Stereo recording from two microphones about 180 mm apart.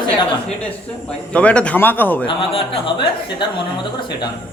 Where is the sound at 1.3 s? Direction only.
5° left (ahead or behind).